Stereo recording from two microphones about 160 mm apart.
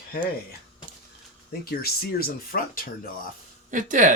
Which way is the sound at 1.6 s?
75° left (ahead or behind).